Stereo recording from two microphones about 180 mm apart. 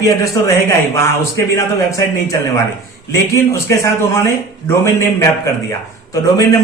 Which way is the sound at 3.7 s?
15° left (ahead or behind).